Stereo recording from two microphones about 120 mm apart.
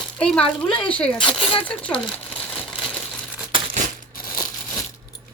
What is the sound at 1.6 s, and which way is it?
Crumpling, 10° left (ahead or behind).